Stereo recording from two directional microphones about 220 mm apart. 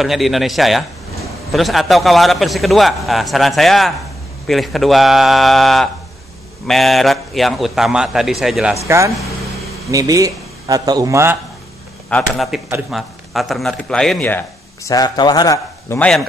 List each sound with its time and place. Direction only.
0.0 s a man's voice: centre (ahead or behind)
8.8 s speech: 15° right (ahead or behind)
12.1 s a man's voice: centre (ahead or behind)